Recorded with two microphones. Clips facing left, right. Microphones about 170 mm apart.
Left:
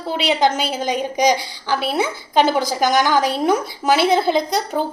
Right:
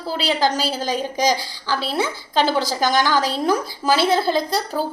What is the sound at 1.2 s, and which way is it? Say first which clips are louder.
A woman's voice: left 5 dB; 15° left (ahead or behind).